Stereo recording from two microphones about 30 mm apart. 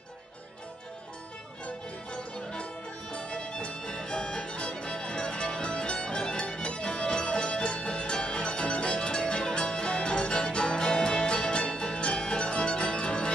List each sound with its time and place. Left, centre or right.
2.3 s music: left